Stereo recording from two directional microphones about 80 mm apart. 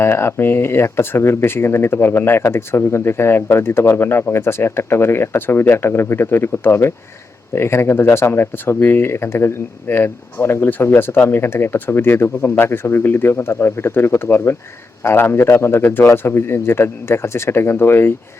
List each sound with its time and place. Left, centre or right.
0.0 s speech: left